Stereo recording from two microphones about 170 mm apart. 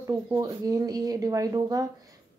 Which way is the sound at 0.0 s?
20° right (ahead or behind).